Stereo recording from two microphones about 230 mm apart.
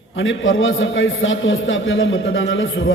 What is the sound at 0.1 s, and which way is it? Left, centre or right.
A man's voice, left.